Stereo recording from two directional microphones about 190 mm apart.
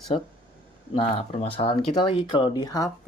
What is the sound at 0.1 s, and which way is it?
Speech, 35° left (ahead or behind).